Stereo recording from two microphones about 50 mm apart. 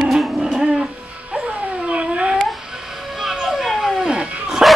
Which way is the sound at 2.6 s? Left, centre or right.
Centre.